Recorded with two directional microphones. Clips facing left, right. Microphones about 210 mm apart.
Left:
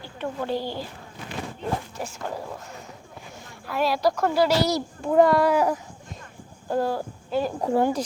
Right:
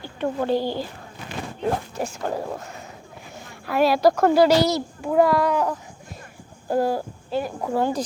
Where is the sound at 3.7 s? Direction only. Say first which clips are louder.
Right 5 dB; 65° right (ahead or behind).